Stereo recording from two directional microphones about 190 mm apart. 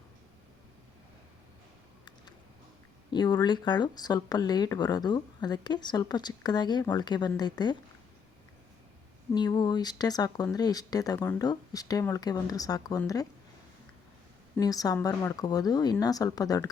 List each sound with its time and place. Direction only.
3.1 s speech: 25° left (ahead or behind)
9.3 s speech: 20° left (ahead or behind)
14.5 s speech: 20° left (ahead or behind)